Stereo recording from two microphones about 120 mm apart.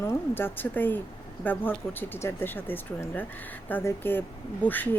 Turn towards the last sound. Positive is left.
turn(degrees=15)  # may be behind; listen again after turning